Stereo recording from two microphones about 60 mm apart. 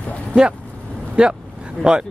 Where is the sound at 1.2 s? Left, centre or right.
Centre.